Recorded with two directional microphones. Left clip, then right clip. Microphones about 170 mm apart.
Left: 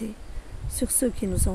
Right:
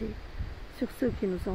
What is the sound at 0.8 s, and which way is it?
Speech, 50° left (ahead or behind).